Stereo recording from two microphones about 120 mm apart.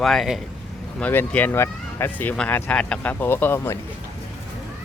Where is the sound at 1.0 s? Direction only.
10° left (ahead or behind).